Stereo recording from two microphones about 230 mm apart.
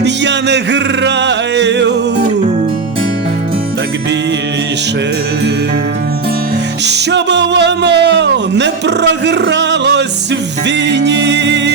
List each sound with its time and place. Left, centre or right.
0.0 s music: right
6.8 s speech: right
10.7 s music: right